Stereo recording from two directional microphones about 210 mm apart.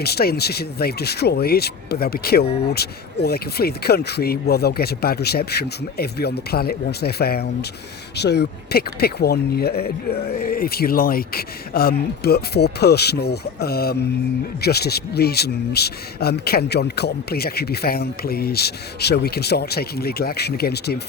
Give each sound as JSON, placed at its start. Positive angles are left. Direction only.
{"t": 0.0, "sound": "speech", "side_deg": 50}